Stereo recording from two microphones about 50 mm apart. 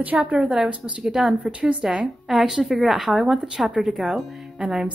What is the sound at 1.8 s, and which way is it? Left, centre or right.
A woman's voice, centre.